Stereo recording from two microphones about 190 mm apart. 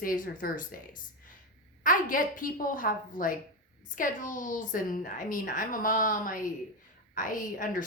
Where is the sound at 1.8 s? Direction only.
45° left (ahead or behind).